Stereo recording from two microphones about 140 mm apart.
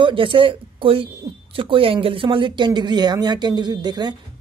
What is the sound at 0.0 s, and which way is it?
Speech, 35° right (ahead or behind).